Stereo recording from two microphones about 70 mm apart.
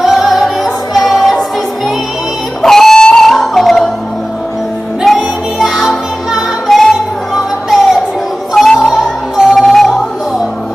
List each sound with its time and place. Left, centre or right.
0.0 s music: centre
2.6 s music: centre
5.0 s music: centre